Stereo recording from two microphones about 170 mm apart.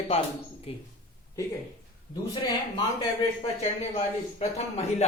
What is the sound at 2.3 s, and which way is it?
Speech, 25° left (ahead or behind).